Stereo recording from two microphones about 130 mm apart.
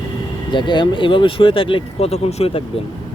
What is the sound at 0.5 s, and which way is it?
Speech, 35° left (ahead or behind).